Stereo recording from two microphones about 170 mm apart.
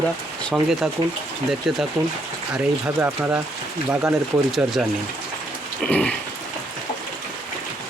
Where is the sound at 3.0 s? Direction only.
10° right (ahead or behind).